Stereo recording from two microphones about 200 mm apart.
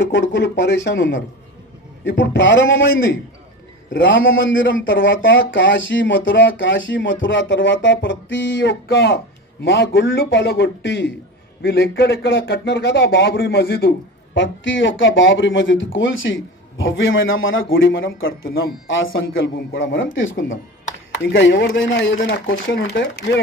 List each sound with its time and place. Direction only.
0.0 s speech: 60° left (ahead or behind)
3.9 s speech: 70° left (ahead or behind)